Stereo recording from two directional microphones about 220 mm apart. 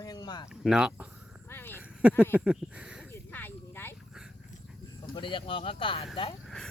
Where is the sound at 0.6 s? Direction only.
5° right (ahead or behind).